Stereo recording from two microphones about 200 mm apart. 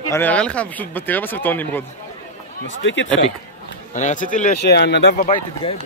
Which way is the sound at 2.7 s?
70° left (ahead or behind).